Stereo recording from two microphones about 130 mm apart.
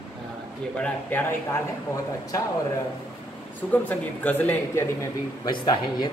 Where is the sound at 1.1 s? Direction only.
15° left (ahead or behind).